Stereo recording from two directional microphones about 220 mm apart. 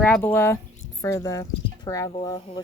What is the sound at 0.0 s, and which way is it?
Speech, 10° left (ahead or behind).